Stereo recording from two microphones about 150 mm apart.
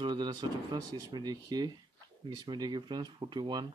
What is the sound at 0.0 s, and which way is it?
Speech, 30° right (ahead or behind).